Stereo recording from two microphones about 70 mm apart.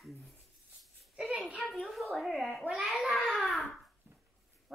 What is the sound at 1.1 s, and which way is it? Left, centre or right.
Speech, centre.